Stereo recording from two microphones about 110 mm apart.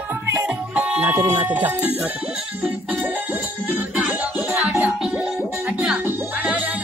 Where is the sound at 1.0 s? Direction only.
30° right (ahead or behind).